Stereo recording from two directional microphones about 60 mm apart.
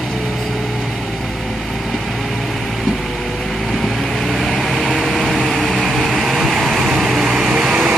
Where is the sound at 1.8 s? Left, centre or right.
Centre.